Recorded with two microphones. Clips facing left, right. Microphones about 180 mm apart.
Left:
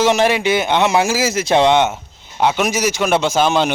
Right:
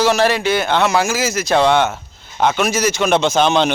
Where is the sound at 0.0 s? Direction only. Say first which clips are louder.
Left 1 dB; 20° left (ahead or behind).